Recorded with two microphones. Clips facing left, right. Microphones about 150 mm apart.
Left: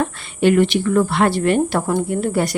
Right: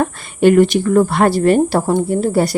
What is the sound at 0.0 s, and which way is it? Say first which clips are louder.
A woman's voice: right 4 dB; 45° right (ahead or behind).